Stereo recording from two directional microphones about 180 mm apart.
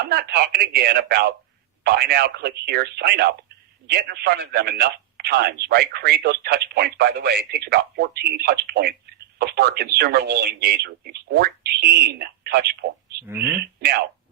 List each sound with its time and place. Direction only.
0.0 s speech: 60° right (ahead or behind)
13.2 s speech: 15° right (ahead or behind)
13.6 s speech: 60° right (ahead or behind)